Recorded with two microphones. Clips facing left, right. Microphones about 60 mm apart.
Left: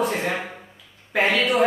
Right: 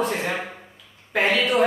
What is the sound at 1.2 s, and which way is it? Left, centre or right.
Speech, left.